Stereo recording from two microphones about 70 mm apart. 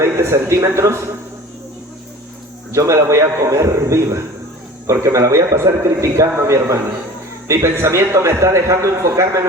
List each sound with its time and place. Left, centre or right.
0.0 s a man's voice: right
2.7 s a man's voice: right